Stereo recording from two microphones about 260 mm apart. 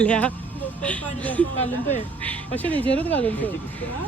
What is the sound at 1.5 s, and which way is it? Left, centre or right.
Speech, left.